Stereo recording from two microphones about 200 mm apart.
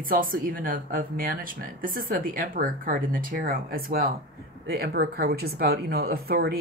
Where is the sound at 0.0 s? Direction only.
45° right (ahead or behind).